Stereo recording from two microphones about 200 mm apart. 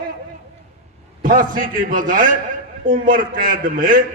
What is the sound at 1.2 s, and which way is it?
A man's voice, 45° right (ahead or behind).